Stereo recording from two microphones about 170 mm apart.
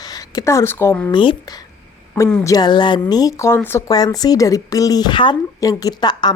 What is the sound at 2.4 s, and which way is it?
A woman's voice, 25° left (ahead or behind).